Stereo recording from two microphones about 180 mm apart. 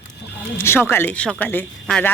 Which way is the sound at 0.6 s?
15° left (ahead or behind).